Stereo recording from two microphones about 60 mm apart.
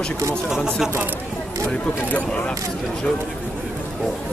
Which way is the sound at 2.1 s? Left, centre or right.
Left.